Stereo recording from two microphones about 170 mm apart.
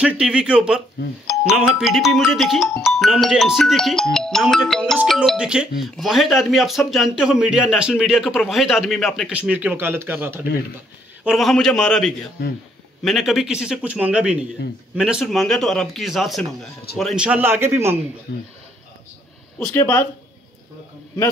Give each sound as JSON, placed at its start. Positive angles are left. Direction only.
{"t": 0.0, "sound": "speech", "side_deg": -5}
{"t": 11.2, "sound": "a man's voice", "side_deg": 0}
{"t": 18.3, "sound": "speech", "side_deg": 90}
{"t": 19.6, "sound": "speech", "side_deg": 15}